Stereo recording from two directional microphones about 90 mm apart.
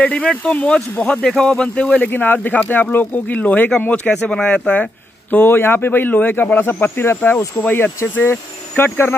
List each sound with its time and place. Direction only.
0.0 s speech: 10° left (ahead or behind)
5.3 s speech: 25° left (ahead or behind)